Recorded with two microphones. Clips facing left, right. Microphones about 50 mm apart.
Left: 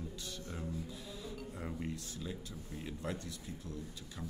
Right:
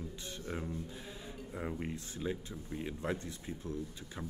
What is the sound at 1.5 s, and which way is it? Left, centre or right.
Speech, right.